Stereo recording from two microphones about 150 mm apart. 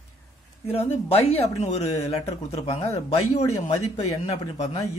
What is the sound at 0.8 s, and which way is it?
Speech, 40° left (ahead or behind).